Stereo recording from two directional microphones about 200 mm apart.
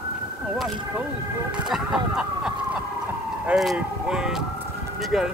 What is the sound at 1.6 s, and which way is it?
Speech, centre (ahead or behind).